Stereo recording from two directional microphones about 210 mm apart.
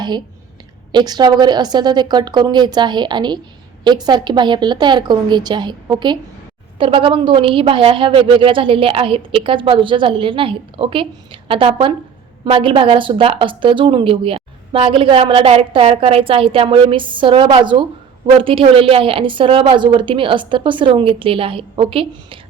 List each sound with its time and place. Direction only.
0.9 s a woman's voice: 20° right (ahead or behind)